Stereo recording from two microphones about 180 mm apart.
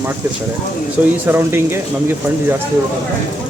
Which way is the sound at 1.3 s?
15° right (ahead or behind).